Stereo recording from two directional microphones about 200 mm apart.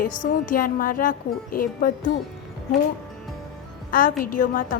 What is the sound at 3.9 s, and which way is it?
Speech, 45° left (ahead or behind).